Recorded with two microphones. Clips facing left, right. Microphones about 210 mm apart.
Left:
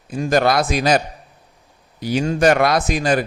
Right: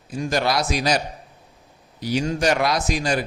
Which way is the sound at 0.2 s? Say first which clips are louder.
Left 6 dB; 55° left (ahead or behind).